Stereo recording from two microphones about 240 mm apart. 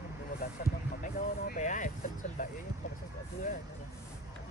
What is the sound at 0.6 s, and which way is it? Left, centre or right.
Speech, left.